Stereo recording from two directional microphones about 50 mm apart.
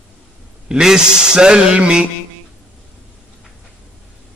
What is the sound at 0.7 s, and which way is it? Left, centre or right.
Speech, centre.